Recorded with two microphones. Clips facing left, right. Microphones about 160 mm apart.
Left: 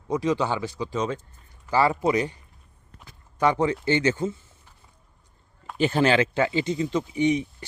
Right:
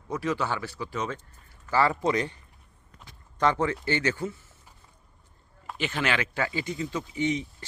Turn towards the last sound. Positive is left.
turn(degrees=15)  # may be behind; listen again after turning